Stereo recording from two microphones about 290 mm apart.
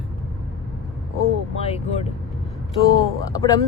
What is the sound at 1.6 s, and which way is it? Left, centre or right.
Speech, centre.